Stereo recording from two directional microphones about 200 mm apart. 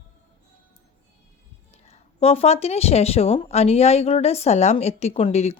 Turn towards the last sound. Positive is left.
turn(degrees=30)  # may be behind; listen again after turning